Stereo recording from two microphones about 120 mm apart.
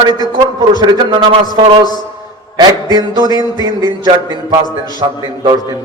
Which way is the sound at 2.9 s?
35° right (ahead or behind).